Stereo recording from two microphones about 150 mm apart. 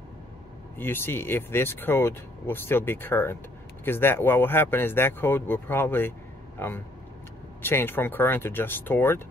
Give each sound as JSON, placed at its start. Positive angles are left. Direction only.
{"t": 0.7, "sound": "speech", "side_deg": 15}
{"t": 7.6, "sound": "speech", "side_deg": 15}